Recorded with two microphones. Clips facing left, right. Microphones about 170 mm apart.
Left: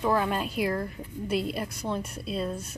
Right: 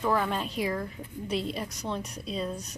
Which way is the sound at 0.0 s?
5° left (ahead or behind).